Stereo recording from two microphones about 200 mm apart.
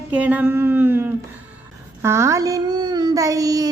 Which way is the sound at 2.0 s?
15° right (ahead or behind).